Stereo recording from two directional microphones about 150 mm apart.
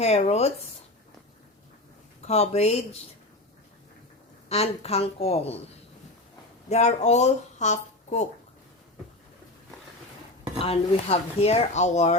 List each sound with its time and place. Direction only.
0.0 s speech: 45° left (ahead or behind)
2.2 s speech: 45° left (ahead or behind)
4.4 s speech: 45° left (ahead or behind)
6.7 s speech: 50° left (ahead or behind)
10.6 s speech: 40° left (ahead or behind)